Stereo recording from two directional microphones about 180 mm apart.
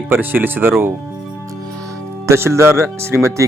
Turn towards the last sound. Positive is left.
turn(degrees=-15)  # may be behind; listen again after turning